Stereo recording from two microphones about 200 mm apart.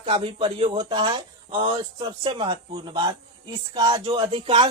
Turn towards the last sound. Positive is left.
turn(degrees=-25)  # may be behind; listen again after turning